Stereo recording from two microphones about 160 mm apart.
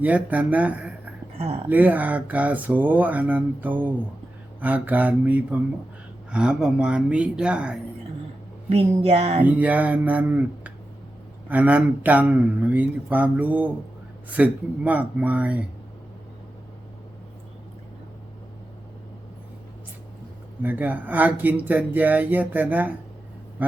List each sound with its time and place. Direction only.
0.0 s speech: 10° right (ahead or behind)
1.4 s a woman's voice: 35° right (ahead or behind)
1.7 s speech: 10° right (ahead or behind)
8.7 s a sound: 35° right (ahead or behind)
9.4 s speech: 10° right (ahead or behind)
20.6 s speech: 10° right (ahead or behind)